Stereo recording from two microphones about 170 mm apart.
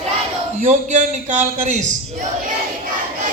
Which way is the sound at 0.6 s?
45° right (ahead or behind).